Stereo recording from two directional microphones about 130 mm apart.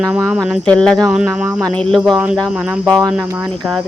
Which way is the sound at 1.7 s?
5° left (ahead or behind).